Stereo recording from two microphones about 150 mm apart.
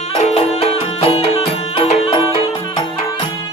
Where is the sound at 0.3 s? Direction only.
45° left (ahead or behind).